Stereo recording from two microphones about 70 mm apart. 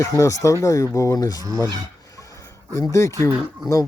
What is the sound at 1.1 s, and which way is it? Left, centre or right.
Speech, left.